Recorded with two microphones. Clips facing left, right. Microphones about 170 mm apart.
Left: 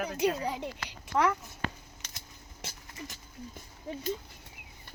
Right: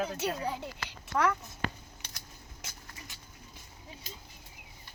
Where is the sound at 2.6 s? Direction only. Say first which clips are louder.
Left 7 dB; 40° left (ahead or behind).